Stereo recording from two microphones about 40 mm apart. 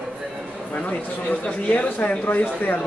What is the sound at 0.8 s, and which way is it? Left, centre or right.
Speech, left.